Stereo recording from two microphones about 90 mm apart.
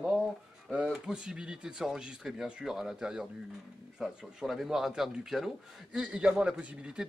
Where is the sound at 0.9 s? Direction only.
10° right (ahead or behind).